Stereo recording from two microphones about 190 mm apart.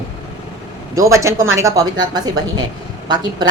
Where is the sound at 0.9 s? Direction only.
15° right (ahead or behind).